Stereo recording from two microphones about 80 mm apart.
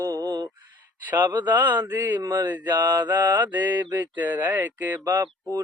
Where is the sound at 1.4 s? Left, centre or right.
Right.